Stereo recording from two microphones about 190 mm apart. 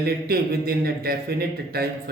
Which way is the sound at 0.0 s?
55° right (ahead or behind).